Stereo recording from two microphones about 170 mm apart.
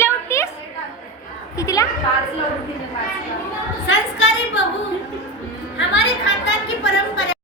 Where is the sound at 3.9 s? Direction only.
90° left.